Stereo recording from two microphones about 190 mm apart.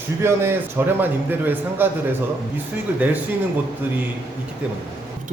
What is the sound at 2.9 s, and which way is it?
Speech, 10° right (ahead or behind).